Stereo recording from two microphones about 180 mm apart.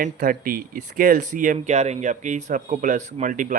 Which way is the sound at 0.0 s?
50° right (ahead or behind).